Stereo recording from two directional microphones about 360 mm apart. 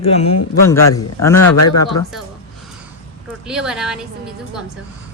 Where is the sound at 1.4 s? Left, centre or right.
Left.